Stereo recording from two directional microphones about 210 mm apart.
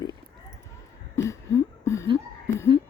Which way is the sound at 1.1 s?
15° left (ahead or behind).